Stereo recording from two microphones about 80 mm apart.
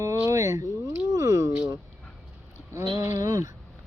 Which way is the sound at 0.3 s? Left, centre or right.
Right.